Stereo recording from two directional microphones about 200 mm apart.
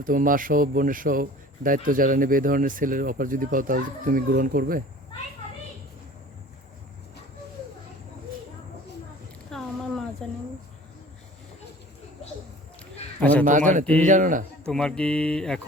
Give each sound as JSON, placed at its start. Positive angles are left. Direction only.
{"t": 0.0, "sound": "speech", "side_deg": -45}
{"t": 9.5, "sound": "a sound", "side_deg": 0}
{"t": 13.4, "sound": "a man's voice", "side_deg": -40}
{"t": 13.8, "sound": "speech", "side_deg": 5}
{"t": 14.1, "sound": "a man's voice", "side_deg": -40}
{"t": 14.6, "sound": "speech", "side_deg": 5}